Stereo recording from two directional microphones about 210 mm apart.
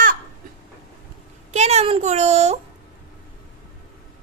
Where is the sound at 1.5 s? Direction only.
30° right (ahead or behind).